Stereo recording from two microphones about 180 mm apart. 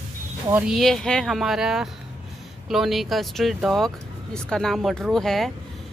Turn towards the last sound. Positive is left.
turn(degrees=0)  # may be behind; listen again after turning